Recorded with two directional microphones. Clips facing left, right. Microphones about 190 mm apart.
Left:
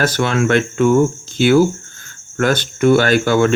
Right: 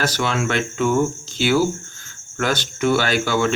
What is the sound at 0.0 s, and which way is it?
Speech, 55° left (ahead or behind).